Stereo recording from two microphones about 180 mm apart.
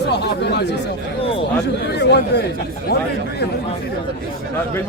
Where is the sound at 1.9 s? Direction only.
65° left (ahead or behind).